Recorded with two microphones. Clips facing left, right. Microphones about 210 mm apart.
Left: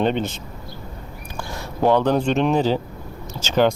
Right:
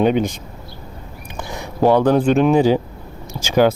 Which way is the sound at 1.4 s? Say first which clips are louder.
Right 4 dB; 15° right (ahead or behind).